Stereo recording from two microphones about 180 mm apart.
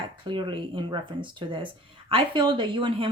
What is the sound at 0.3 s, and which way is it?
Speech, 25° right (ahead or behind).